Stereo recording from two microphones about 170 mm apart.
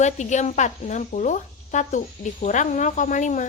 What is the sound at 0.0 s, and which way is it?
Speech, 45° left (ahead or behind).